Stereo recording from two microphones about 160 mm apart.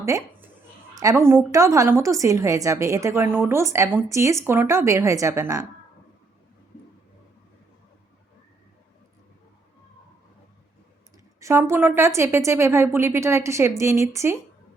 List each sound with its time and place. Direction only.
0.0 s a sound: 15° right (ahead or behind)
0.9 s a woman's voice: 20° right (ahead or behind)
11.3 s a woman's voice: 15° right (ahead or behind)